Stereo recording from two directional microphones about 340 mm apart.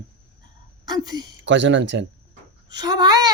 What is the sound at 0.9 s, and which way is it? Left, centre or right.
Speech, centre.